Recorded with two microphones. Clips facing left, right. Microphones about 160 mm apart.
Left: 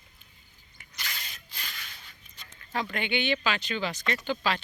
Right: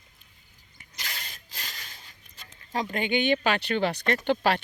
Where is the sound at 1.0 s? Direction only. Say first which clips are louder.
Right 1 dB; 40° right (ahead or behind).